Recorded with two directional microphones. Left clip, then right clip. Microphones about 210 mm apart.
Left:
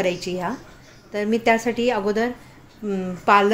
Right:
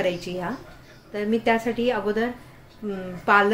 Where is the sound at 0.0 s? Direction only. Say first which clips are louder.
Left 2 dB; 25° left (ahead or behind).